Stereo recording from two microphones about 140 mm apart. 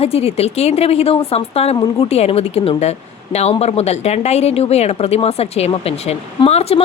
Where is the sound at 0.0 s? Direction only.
45° left (ahead or behind).